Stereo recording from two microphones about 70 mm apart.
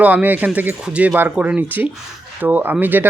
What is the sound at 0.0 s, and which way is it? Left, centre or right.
Speech, right.